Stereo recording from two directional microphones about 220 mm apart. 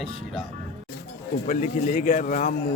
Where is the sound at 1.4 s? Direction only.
35° left (ahead or behind).